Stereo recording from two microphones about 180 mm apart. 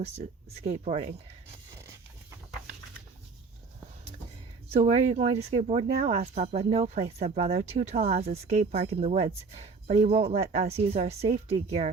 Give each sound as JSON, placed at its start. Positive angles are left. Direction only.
{"t": 0.0, "sound": "speech", "side_deg": -35}
{"t": 4.7, "sound": "speech", "side_deg": -40}